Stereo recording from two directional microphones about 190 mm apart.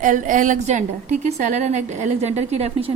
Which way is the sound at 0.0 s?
40° right (ahead or behind).